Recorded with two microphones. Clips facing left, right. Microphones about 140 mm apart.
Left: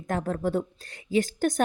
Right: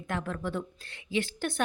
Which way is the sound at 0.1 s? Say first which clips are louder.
Left 6 dB; 40° left (ahead or behind).